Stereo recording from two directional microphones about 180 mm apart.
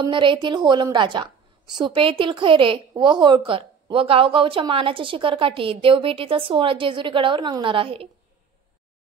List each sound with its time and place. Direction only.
0.0 s a woman's voice: 25° right (ahead or behind)